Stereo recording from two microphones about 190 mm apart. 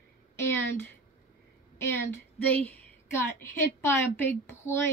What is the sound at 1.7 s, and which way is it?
A woman's voice, 15° left (ahead or behind).